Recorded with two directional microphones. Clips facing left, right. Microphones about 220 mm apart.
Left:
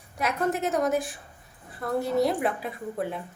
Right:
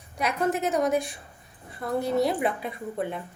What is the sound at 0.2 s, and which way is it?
Speech, centre (ahead or behind).